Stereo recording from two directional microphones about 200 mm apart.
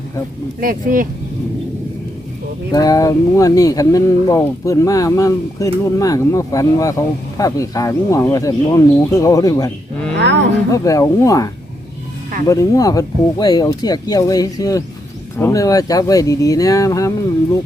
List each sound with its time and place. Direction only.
0.6 s speech: 45° right (ahead or behind)
2.7 s speech: 20° left (ahead or behind)